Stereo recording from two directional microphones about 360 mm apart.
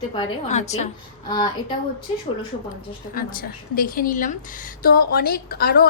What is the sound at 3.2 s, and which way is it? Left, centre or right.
A woman's voice, left.